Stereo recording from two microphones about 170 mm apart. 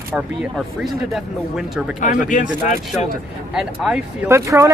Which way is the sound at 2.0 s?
50° left (ahead or behind).